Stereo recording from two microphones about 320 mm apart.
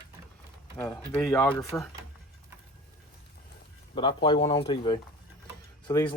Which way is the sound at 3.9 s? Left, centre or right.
Centre.